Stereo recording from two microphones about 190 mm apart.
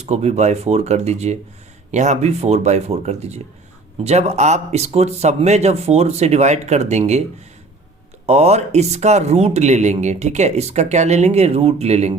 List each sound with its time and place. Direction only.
0.0 s speech: 35° right (ahead or behind)
8.3 s speech: 35° right (ahead or behind)